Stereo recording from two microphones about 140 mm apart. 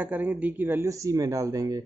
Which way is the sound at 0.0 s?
10° right (ahead or behind).